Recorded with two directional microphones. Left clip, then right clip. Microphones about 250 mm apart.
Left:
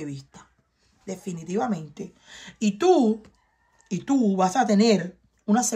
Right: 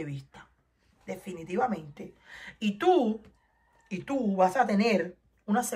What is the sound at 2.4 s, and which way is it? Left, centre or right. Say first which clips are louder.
Speech: left 6 dB; left.